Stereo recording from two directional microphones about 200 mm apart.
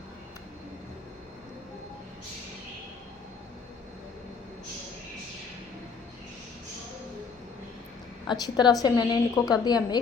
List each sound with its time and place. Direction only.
8.3 s a woman's voice: 20° left (ahead or behind)